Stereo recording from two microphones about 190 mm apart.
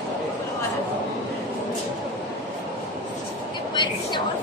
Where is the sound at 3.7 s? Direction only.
25° left (ahead or behind).